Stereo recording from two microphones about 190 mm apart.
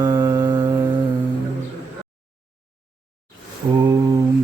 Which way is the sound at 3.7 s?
20° right (ahead or behind).